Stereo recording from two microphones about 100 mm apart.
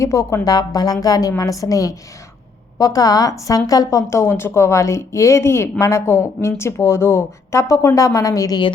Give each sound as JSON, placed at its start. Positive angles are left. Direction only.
{"t": 0.0, "sound": "speech", "side_deg": 30}